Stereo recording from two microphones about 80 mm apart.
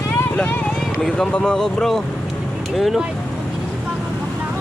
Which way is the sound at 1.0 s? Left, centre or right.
Centre.